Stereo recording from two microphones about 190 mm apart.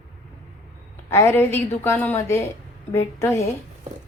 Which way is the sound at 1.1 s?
15° left (ahead or behind).